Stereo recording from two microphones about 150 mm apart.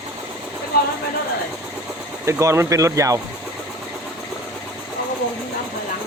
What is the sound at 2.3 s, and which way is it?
Speech, 20° right (ahead or behind).